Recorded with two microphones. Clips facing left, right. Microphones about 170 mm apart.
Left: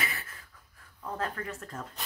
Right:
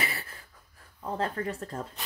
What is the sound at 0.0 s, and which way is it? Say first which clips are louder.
Pant: right 2 dB; 30° right (ahead or behind).